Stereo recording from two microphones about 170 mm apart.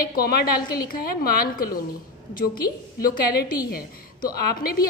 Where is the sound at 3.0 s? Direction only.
60° left (ahead or behind).